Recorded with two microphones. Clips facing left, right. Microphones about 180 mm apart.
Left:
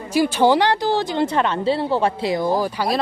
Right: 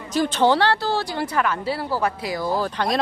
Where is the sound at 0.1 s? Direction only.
10° left (ahead or behind).